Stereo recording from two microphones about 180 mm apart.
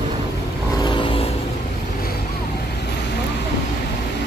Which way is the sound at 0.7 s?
25° left (ahead or behind).